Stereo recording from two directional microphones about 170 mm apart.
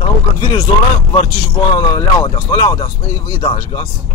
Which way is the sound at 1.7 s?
25° left (ahead or behind).